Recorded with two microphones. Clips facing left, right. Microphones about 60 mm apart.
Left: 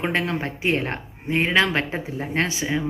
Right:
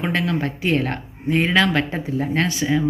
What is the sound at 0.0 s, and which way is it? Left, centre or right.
Speech, left.